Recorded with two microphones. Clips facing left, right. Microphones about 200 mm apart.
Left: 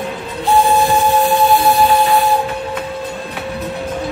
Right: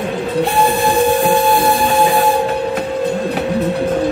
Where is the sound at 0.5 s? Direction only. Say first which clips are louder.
Left 6 dB; 55° right (ahead or behind).